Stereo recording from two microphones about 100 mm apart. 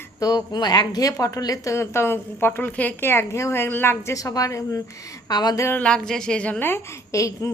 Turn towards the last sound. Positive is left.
turn(degrees=30)  # may be behind; listen again after turning